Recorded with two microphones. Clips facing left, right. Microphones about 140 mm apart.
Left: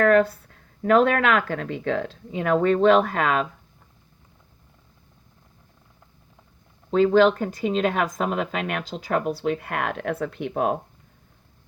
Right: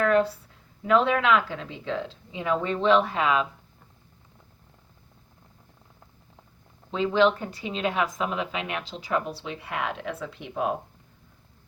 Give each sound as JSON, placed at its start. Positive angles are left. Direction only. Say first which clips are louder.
{"t": 0.0, "sound": "speech", "louder": "left 4 dB", "side_deg": 50}
{"t": 6.9, "sound": "speech", "louder": "left 5 dB", "side_deg": 45}